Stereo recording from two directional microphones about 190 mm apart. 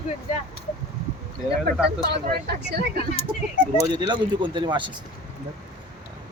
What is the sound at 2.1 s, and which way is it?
Speech, 55° right (ahead or behind).